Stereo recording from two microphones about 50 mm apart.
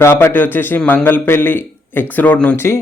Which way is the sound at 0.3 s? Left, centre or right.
Left.